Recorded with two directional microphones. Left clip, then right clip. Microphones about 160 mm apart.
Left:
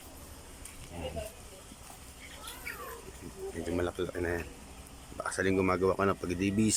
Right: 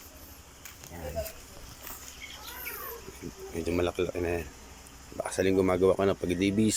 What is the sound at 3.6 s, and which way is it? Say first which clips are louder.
Speech: right 5 dB; 5° left (ahead or behind).